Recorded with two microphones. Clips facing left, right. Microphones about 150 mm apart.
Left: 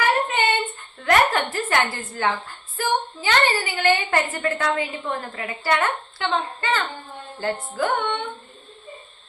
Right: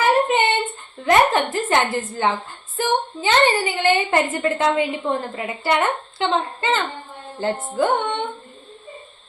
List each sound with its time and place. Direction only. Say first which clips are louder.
0.1 s child singing: right 4 dB; 20° right (ahead or behind)
1.0 s a woman's voice: right 3 dB; 20° right (ahead or behind)